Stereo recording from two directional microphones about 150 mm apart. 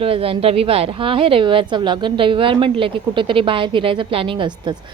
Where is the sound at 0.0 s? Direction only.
40° right (ahead or behind).